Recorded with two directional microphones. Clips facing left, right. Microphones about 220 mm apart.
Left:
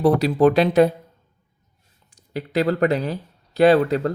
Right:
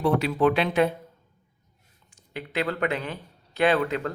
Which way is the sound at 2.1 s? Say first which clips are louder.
Left 7 dB; 40° left (ahead or behind).